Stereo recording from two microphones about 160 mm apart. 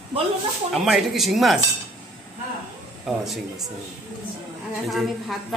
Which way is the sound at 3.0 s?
Centre (ahead or behind).